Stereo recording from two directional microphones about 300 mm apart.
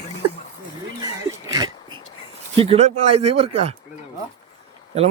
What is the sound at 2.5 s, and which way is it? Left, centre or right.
Speech, centre.